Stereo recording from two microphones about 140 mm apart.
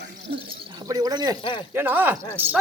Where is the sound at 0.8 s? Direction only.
25° right (ahead or behind).